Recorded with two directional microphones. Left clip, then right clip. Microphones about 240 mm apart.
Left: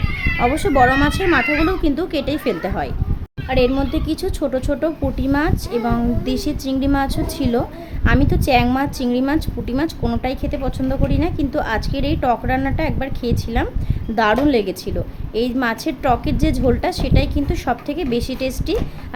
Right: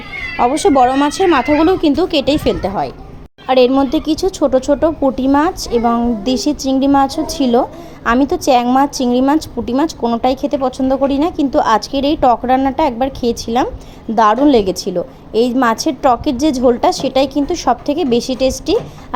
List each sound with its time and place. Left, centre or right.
0.3 s speech: right
3.4 s a woman's voice: right